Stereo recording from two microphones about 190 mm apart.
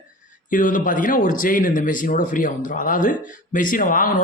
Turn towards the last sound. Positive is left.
turn(degrees=45)  # may be behind; listen again after turning